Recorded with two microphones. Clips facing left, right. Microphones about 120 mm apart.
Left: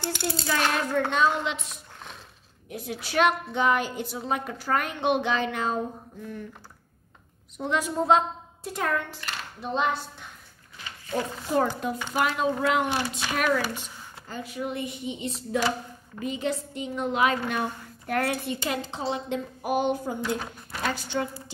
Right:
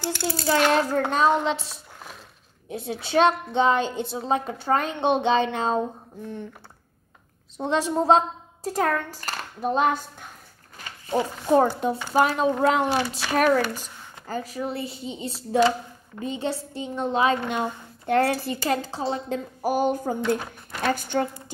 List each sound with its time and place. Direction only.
0.0 s a child's voice: 20° left (ahead or behind)
1.1 s a woman's voice: 35° right (ahead or behind)
7.5 s a child's voice: 30° right (ahead or behind); by 10.3 s 45° right (ahead or behind)
11.7 s a woman's voice: 30° right (ahead or behind)
20.2 s speech: 5° left (ahead or behind)
20.9 s a woman's voice: 50° right (ahead or behind)